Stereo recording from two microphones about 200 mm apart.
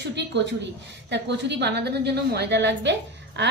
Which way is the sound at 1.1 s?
60° right (ahead or behind).